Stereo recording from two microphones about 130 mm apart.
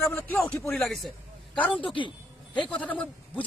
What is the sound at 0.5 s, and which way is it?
Speech, 15° left (ahead or behind).